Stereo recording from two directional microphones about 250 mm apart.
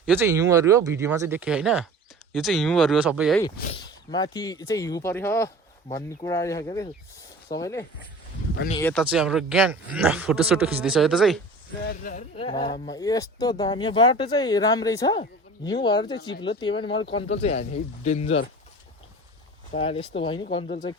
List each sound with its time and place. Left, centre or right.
0.0 s speech: centre
3.6 s speech: left; by 11.3 s centre
11.8 s speech: left
12.4 s speech: left
19.7 s speech: left